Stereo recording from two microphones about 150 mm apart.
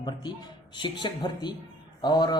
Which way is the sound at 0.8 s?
30° left (ahead or behind).